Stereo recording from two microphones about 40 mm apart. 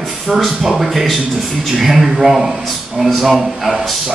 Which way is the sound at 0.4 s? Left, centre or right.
Centre.